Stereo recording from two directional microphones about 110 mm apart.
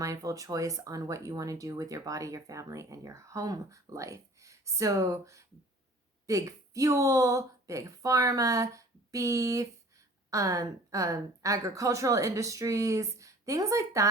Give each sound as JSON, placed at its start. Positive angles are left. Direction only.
{"t": 0.0, "sound": "speech", "side_deg": -30}